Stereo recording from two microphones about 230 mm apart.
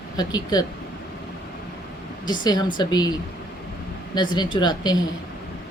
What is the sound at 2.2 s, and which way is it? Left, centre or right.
Speech, centre.